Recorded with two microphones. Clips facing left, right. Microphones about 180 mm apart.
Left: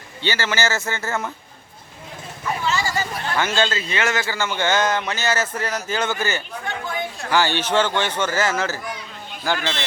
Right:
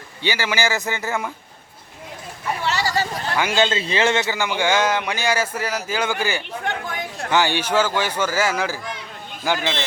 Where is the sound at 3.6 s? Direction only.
30° right (ahead or behind).